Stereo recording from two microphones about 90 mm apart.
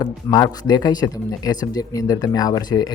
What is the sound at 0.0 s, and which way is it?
Speech, 45° left (ahead or behind).